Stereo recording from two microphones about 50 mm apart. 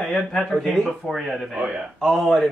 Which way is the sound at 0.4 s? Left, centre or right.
Centre.